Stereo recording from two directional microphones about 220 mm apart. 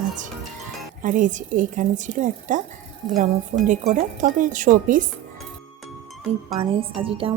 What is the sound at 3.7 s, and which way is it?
Speech, 35° right (ahead or behind).